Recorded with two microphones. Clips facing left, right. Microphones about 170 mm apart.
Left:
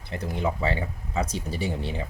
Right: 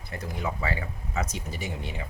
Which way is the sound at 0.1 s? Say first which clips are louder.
Left 5 dB; 30° left (ahead or behind).